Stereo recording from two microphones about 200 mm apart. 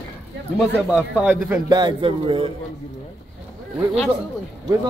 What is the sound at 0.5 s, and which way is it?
Speech, 5° right (ahead or behind).